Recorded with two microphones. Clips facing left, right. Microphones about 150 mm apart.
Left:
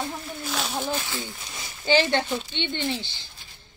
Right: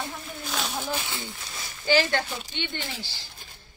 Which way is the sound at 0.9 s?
10° right (ahead or behind).